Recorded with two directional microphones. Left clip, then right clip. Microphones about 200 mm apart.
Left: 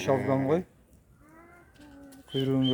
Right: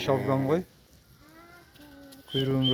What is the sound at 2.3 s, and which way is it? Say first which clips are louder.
Speech: right 1 dB; 10° left (ahead or behind).